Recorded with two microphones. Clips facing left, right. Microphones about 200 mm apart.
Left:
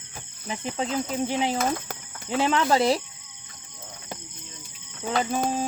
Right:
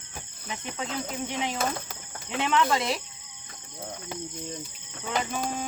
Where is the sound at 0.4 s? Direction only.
35° left (ahead or behind).